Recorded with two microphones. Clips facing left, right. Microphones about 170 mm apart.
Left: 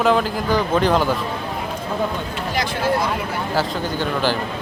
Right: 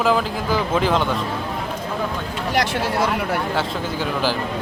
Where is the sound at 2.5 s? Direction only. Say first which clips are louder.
Even; 75° right (ahead or behind).